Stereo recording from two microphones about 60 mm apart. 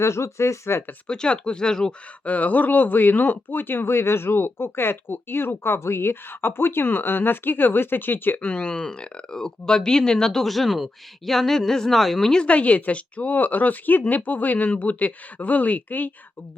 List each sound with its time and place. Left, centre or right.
0.0 s speech: left
1.0 s speech: centre
2.2 s a woman's voice: left